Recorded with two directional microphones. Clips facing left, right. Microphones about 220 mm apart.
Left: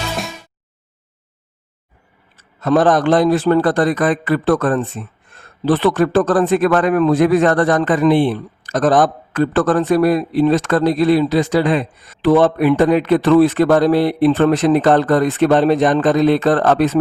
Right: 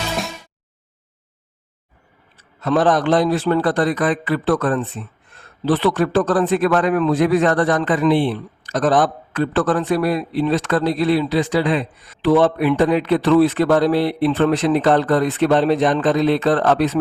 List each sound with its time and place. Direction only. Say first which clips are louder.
2.3 s speech: left 4 dB; 45° left (ahead or behind)